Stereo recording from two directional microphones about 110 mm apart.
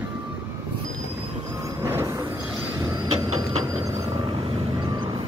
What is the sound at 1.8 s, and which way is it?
Train, 25° right (ahead or behind).